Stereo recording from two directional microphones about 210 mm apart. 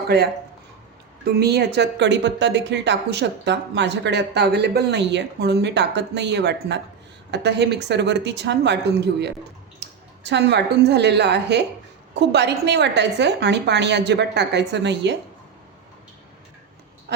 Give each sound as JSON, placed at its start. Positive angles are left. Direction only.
{"t": 1.2, "sound": "speech", "side_deg": -50}
{"t": 9.8, "sound": "clicking", "side_deg": -55}
{"t": 10.2, "sound": "a woman's voice", "side_deg": -55}